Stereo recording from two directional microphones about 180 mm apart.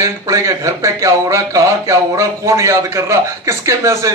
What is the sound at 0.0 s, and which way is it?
Speech, 15° right (ahead or behind).